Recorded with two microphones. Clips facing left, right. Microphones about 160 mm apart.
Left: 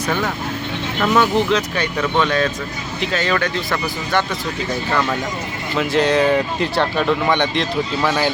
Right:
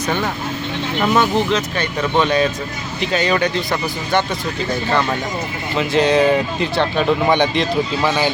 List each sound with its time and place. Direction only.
0.9 s speech: 15° right (ahead or behind)
5.9 s speech: centre (ahead or behind)